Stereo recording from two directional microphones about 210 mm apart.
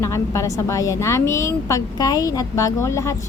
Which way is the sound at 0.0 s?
15° left (ahead or behind).